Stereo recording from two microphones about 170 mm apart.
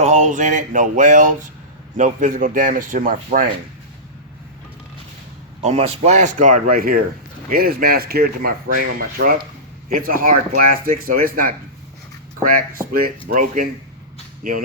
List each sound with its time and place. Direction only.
0.0 s speech: 45° right (ahead or behind)
5.6 s speech: 40° right (ahead or behind)